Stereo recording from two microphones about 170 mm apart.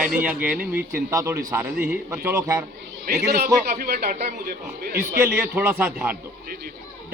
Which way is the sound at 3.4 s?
60° right (ahead or behind).